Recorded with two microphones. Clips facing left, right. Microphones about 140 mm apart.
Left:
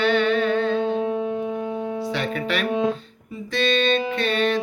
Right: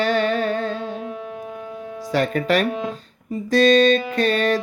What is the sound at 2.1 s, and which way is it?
Music, 45° right (ahead or behind).